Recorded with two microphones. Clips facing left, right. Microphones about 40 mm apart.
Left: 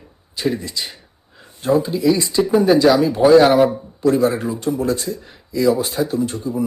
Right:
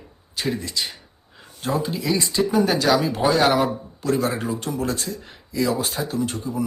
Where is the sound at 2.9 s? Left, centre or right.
Right.